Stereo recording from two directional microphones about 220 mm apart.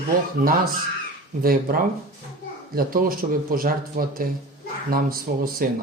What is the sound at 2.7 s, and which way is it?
Speech, 40° right (ahead or behind).